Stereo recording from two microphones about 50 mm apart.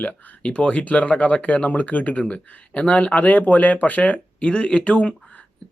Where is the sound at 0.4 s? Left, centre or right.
Left.